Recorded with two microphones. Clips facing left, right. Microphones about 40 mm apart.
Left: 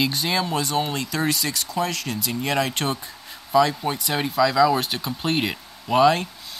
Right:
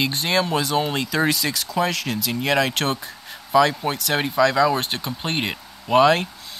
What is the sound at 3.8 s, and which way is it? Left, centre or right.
Speech, right.